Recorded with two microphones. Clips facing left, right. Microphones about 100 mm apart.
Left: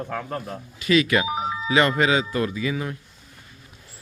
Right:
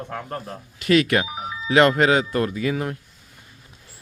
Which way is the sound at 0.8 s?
60° right (ahead or behind).